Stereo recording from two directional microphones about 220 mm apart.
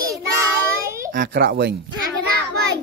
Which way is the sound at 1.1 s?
45° right (ahead or behind).